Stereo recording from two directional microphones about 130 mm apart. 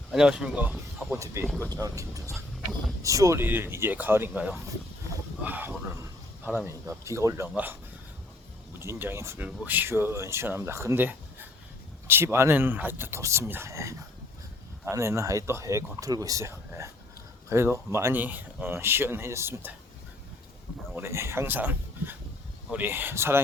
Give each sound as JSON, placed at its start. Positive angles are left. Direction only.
{"t": 0.1, "sound": "speech", "side_deg": -5}
{"t": 1.2, "sound": "speech", "side_deg": -20}
{"t": 1.5, "sound": "speech", "side_deg": 10}
{"t": 1.8, "sound": "speech", "side_deg": -25}
{"t": 8.8, "sound": "speech", "side_deg": -20}
{"t": 20.9, "sound": "speech", "side_deg": -20}